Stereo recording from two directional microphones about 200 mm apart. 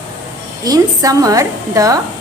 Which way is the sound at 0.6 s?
20° right (ahead or behind).